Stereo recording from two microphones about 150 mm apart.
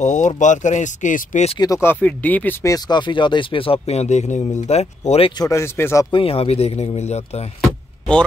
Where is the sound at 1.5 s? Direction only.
25° left (ahead or behind).